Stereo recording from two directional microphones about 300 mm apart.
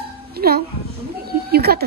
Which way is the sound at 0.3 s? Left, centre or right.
Right.